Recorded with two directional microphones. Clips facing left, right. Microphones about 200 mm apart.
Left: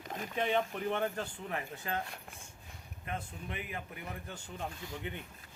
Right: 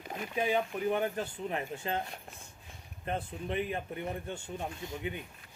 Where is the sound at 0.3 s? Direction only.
10° right (ahead or behind).